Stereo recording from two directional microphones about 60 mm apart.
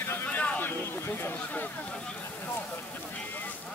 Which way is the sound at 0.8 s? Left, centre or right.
Left.